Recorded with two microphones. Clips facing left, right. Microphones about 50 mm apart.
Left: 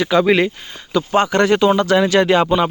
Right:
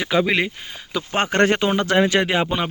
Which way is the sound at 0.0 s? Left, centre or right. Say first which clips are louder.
Left 5 dB; centre.